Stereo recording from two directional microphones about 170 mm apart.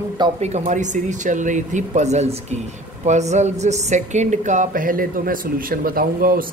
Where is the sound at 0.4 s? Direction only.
45° right (ahead or behind).